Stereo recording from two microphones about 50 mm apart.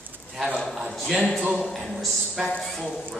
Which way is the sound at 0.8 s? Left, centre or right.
Centre.